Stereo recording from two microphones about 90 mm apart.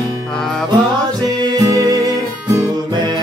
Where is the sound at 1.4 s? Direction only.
45° right (ahead or behind).